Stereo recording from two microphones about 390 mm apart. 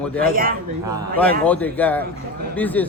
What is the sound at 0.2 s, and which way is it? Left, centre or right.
Speech, right.